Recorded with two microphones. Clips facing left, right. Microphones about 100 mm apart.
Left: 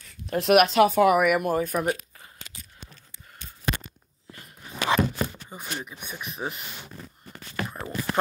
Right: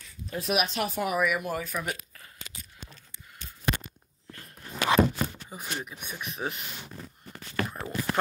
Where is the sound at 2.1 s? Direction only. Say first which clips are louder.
Left 1 dB; 25° left (ahead or behind).